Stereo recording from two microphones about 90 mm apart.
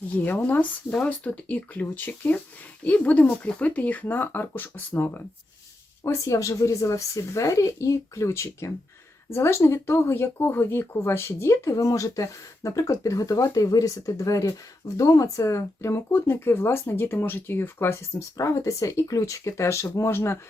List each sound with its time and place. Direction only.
0.3 s speech: 20° left (ahead or behind)
6.0 s speech: 35° left (ahead or behind)